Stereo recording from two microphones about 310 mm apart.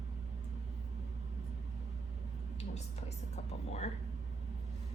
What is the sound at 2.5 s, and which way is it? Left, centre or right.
Speech, left.